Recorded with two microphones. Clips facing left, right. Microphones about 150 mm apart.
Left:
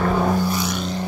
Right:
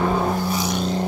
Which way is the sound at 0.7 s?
35° right (ahead or behind).